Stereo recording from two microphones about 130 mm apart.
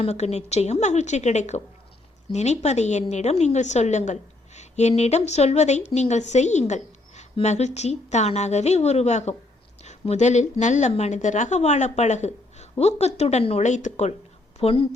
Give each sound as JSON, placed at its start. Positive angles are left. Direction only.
{"t": 0.0, "sound": "a woman's voice", "side_deg": 55}
{"t": 14.6, "sound": "a woman's voice", "side_deg": 45}